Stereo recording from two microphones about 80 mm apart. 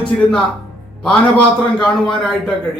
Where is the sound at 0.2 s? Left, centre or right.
Centre.